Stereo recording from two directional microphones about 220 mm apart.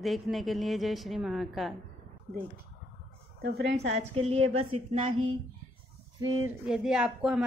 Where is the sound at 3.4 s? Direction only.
45° right (ahead or behind).